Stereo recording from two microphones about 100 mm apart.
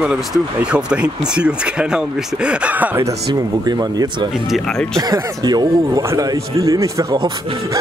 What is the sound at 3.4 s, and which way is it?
Speech, 40° right (ahead or behind).